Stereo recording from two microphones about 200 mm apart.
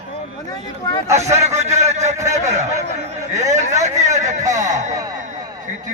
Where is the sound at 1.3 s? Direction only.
35° right (ahead or behind).